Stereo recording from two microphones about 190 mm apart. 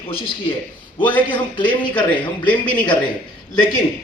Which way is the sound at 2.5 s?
5° left (ahead or behind).